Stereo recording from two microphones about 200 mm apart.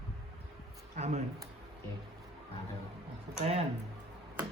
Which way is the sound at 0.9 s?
35° right (ahead or behind).